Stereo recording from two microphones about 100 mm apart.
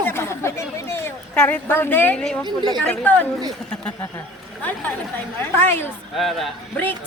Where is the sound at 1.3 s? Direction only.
15° left (ahead or behind).